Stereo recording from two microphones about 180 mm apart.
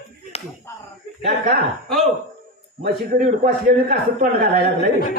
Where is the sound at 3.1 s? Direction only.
55° right (ahead or behind).